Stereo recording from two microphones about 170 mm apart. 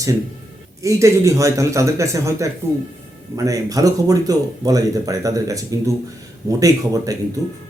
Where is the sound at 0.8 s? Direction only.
20° right (ahead or behind).